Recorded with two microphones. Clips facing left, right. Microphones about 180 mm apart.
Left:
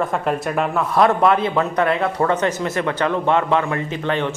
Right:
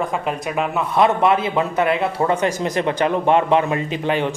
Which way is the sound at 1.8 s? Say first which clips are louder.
Even; 25° right (ahead or behind).